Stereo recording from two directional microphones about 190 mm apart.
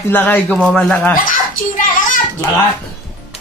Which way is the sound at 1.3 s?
45° left (ahead or behind).